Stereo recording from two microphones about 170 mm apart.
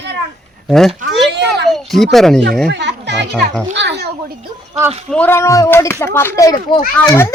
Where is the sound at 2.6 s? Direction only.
85° right.